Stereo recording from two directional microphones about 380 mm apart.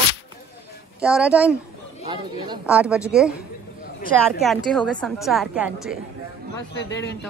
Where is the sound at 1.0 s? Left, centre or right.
Centre.